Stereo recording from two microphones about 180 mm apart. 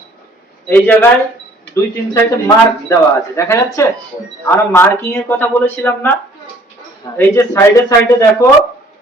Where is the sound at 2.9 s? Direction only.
15° left (ahead or behind).